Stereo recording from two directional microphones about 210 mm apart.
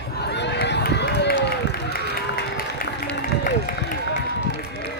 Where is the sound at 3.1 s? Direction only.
45° left (ahead or behind).